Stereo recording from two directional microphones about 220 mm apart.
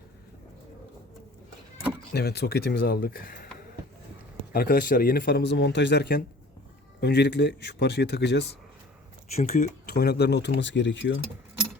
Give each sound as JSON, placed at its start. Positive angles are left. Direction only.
{"t": 2.1, "sound": "speech", "side_deg": 45}
{"t": 4.5, "sound": "speech", "side_deg": 40}
{"t": 9.3, "sound": "speech", "side_deg": 30}